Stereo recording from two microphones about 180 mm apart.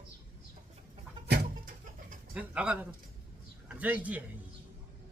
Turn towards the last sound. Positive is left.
turn(degrees=-10)  # may be behind; listen again after turning